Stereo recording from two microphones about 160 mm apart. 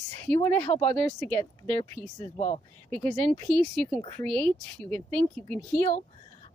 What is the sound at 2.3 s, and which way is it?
Speech, 45° left (ahead or behind).